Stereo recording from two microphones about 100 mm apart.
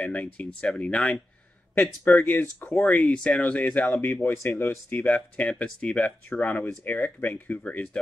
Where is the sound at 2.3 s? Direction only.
20° left (ahead or behind).